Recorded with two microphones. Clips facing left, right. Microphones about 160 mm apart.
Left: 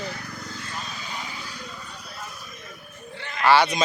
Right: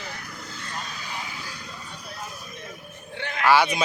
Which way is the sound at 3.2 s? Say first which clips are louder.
Right 5 dB; 65° right (ahead or behind).